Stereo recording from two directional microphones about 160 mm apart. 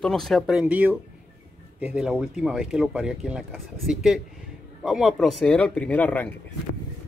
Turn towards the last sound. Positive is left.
turn(degrees=10)  # may be behind; listen again after turning